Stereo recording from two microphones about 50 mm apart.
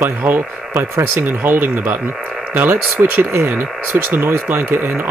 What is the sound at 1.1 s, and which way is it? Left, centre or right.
Speech, right.